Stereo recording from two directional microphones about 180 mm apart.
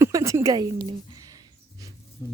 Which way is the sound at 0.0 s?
15° right (ahead or behind).